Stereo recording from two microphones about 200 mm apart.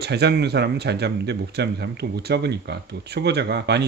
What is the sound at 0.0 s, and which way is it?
A man's voice, 55° right (ahead or behind).